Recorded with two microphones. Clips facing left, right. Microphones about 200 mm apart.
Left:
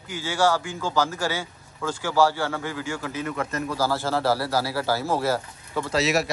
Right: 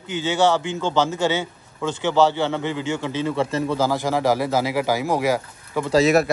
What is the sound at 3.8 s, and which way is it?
Speech, 15° right (ahead or behind).